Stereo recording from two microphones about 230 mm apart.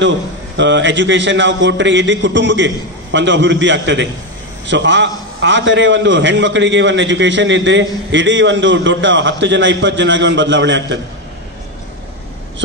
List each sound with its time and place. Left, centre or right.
0.6 s a man's voice: right